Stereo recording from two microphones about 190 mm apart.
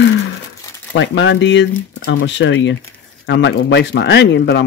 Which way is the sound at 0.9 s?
80° left.